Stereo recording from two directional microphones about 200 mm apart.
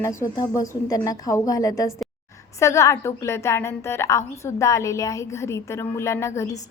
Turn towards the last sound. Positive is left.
turn(degrees=15)  # may be behind; listen again after turning